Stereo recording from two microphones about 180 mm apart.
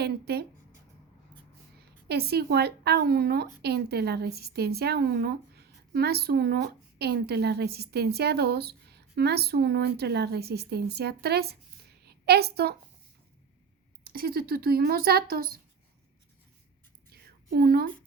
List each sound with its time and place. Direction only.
0.0 s speech: 60° right (ahead or behind)
2.0 s a woman's voice: 60° right (ahead or behind)
14.1 s speech: 55° right (ahead or behind)
17.1 s a sound: 60° right (ahead or behind)